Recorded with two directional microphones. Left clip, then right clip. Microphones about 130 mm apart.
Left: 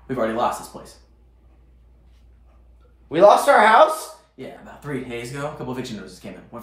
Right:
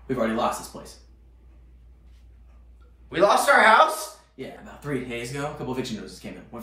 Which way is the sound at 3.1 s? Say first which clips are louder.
Left 5 dB; 60° left (ahead or behind).